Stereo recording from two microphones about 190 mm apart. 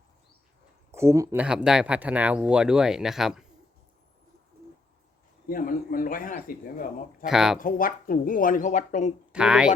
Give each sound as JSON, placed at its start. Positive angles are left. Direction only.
{"t": 0.9, "sound": "speech", "side_deg": -15}
{"t": 5.5, "sound": "speech", "side_deg": 50}
{"t": 7.3, "sound": "speech", "side_deg": -5}
{"t": 7.6, "sound": "speech", "side_deg": 50}
{"t": 9.3, "sound": "speech", "side_deg": -5}